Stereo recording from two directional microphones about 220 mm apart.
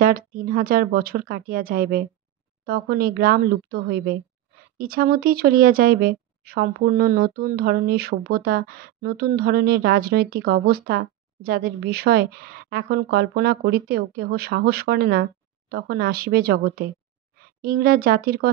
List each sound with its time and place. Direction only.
0.0 s speech: 40° right (ahead or behind)